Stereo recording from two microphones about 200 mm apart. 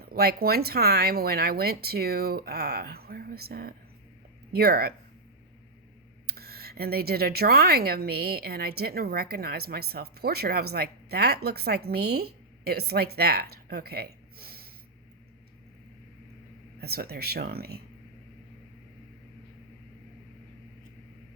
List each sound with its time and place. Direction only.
0.0 s speech: 50° right (ahead or behind)
6.2 s speech: 50° right (ahead or behind)
16.8 s speech: 50° right (ahead or behind)